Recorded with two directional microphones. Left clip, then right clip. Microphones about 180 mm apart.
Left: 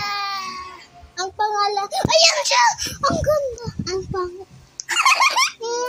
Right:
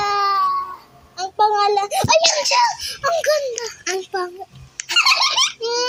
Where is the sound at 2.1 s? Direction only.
Centre (ahead or behind).